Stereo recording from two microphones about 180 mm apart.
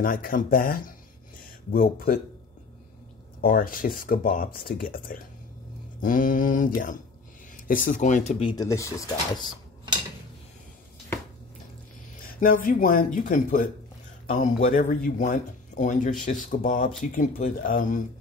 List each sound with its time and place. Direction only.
0.0 s speech: 50° left (ahead or behind)
3.3 s speech: 55° left (ahead or behind)
8.5 s speech: 20° left (ahead or behind)
12.3 s speech: 50° left (ahead or behind)